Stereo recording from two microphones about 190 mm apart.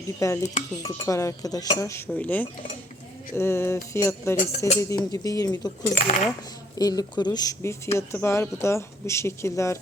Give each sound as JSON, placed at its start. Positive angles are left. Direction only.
{"t": 0.2, "sound": "speech", "side_deg": 15}
{"t": 5.8, "sound": "speech", "side_deg": 35}
{"t": 6.7, "sound": "speech", "side_deg": 20}